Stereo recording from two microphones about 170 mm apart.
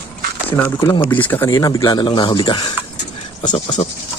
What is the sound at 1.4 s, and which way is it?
Speech, 20° left (ahead or behind).